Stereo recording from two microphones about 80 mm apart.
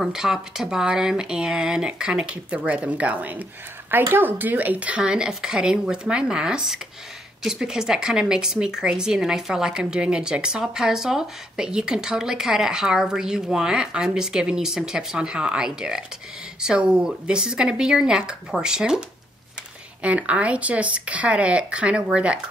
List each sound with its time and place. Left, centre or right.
0.0 s speech: centre